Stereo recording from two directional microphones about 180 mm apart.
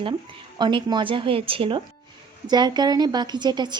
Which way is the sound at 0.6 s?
25° right (ahead or behind).